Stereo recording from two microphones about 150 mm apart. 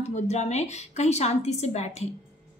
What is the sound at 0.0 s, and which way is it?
A woman's voice, 50° left (ahead or behind).